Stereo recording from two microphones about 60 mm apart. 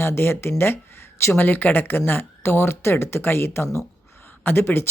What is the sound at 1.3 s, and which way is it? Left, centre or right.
Speech, left.